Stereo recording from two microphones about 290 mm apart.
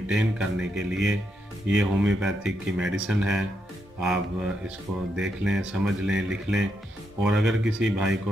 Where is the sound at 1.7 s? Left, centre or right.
Centre.